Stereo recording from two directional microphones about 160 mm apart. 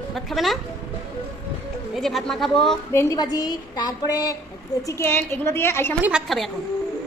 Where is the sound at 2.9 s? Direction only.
15° left (ahead or behind).